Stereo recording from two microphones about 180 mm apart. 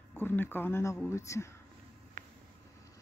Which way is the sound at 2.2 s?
45° right (ahead or behind).